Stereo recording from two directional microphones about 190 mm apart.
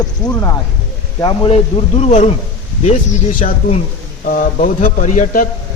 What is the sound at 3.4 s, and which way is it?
A man's voice, 45° left (ahead or behind).